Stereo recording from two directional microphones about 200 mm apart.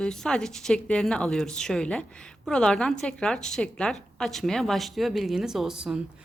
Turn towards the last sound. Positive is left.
turn(degrees=-5)  # may be behind; listen again after turning